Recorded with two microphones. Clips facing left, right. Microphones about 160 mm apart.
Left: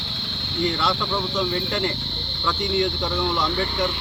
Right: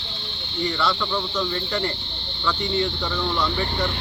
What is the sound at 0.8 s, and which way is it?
Speech, 20° left (ahead or behind).